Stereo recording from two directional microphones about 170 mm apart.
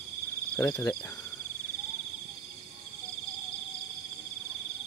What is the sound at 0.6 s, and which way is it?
Speech, 20° left (ahead or behind).